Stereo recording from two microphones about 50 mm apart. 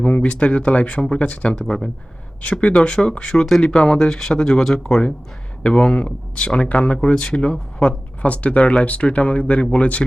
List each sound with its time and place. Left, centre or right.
0.0 s speech: left
1.6 s speech: centre
2.4 s speech: left; by 5.0 s centre
5.6 s speech: left